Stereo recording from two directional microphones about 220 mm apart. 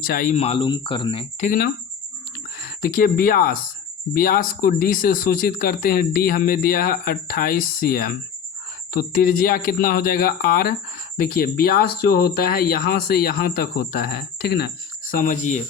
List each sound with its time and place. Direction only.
0.0 s speech: 40° left (ahead or behind)
2.6 s speech: 45° left (ahead or behind)
15.1 s speech: 35° left (ahead or behind)